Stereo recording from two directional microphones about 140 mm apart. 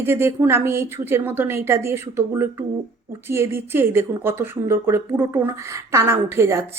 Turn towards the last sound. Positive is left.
turn(degrees=-20)  # may be behind; listen again after turning